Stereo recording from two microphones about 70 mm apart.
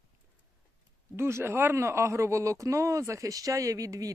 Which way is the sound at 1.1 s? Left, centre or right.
Right.